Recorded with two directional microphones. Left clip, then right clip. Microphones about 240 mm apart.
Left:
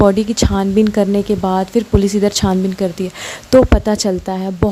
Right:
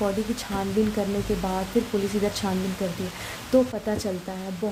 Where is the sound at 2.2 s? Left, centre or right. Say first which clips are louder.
Left 11 dB; left.